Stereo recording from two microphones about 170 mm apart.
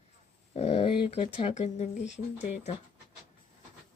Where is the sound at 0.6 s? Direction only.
40° left (ahead or behind).